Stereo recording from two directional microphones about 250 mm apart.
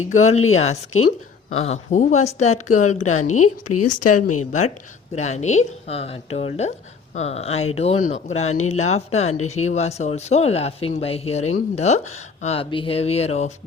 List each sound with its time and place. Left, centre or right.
0.5 s speech: left
3.2 s a woman's voice: left
5.1 s speech: left